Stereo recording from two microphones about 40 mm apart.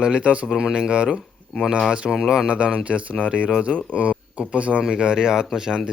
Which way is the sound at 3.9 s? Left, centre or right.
Right.